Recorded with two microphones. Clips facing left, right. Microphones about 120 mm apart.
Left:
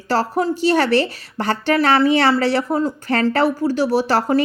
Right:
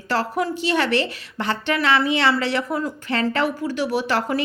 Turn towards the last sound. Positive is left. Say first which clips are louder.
# left 5 dB
turn(degrees=35)  # may be behind; listen again after turning